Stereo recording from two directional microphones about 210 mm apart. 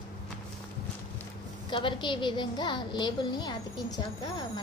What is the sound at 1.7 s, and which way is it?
A woman's voice, 25° left (ahead or behind).